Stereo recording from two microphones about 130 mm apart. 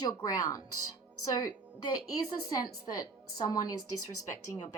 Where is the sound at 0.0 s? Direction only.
30° left (ahead or behind).